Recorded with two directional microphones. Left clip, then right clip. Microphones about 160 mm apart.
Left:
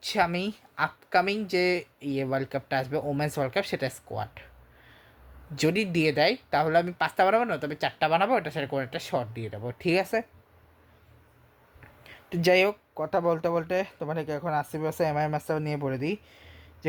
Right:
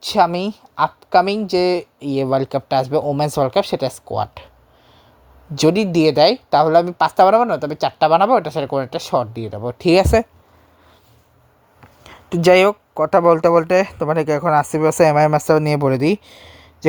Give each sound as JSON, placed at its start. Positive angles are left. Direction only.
{"t": 0.0, "sound": "speech", "side_deg": -35}
{"t": 5.5, "sound": "speech", "side_deg": -35}
{"t": 11.8, "sound": "speech", "side_deg": -30}